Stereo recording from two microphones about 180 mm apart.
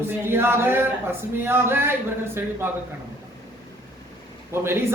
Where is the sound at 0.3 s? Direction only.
15° right (ahead or behind).